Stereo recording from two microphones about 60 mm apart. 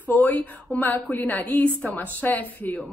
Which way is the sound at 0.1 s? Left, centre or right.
Left.